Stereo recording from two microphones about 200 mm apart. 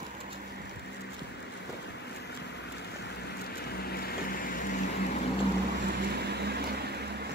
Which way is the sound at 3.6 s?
50° left (ahead or behind).